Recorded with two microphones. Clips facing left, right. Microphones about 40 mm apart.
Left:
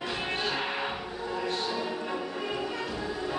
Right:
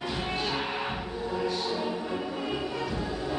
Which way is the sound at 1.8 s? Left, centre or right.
Centre.